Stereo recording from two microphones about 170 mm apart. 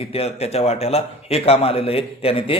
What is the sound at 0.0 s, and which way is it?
A man's voice, 35° left (ahead or behind).